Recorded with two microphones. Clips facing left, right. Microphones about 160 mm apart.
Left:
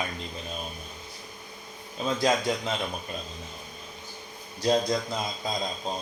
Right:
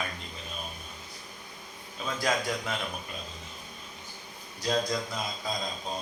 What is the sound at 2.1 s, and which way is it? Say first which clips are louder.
Speech: left 4 dB; 25° left (ahead or behind).